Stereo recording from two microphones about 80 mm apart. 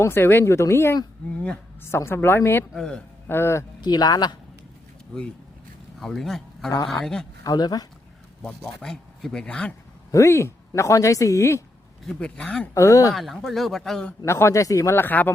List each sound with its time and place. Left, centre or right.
0.0 s speech: left
2.0 s a woman's voice: left
2.7 s speech: centre
3.2 s speech: left
3.8 s speech: left
6.0 s speech: centre
7.4 s speech: left
8.4 s speech: centre
10.1 s speech: left
12.0 s speech: centre
12.7 s speech: left
13.1 s speech: centre
14.3 s speech: left
14.9 s a woman's voice: left